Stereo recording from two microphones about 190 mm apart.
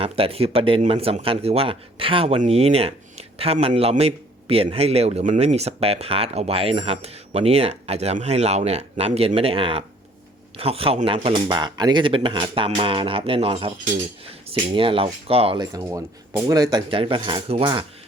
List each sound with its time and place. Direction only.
0.0 s speech: 30° right (ahead or behind)
15.6 s speech: 20° right (ahead or behind)